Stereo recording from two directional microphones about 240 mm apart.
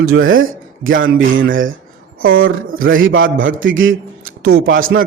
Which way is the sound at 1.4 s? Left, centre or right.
Right.